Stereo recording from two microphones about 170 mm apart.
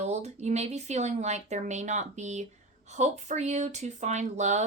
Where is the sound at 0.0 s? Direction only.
40° right (ahead or behind).